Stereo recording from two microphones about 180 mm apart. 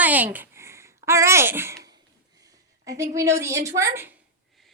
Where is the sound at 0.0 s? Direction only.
10° right (ahead or behind).